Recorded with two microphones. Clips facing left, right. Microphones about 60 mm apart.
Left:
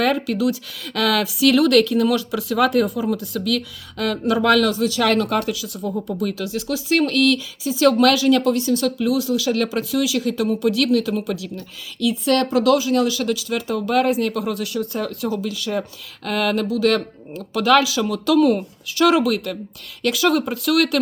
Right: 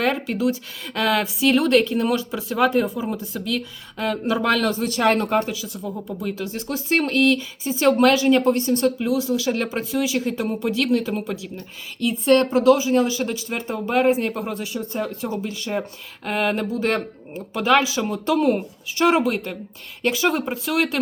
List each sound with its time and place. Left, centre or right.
0.0 s speech: right
5.8 s speech: centre
6.2 s speech: right